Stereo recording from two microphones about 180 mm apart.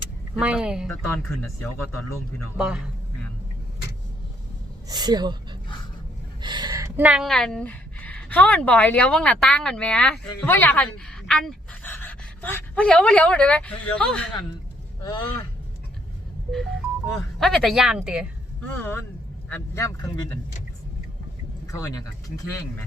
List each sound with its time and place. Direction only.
0.3 s speech: 5° right (ahead or behind)
0.9 s speech: 10° left (ahead or behind)
2.6 s speech: 5° right (ahead or behind)
4.9 s speech: 20° right (ahead or behind)
6.4 s speech: 25° right (ahead or behind); by 14.3 s 5° left (ahead or behind)
17.4 s speech: centre (ahead or behind)
18.8 s speech: 10° left (ahead or behind)
21.7 s speech: 15° left (ahead or behind)